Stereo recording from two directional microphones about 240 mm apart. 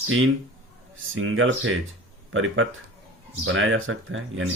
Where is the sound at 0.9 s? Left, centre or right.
Right.